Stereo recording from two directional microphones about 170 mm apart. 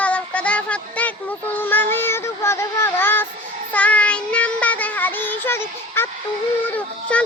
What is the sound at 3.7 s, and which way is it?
Child singing, 10° left (ahead or behind).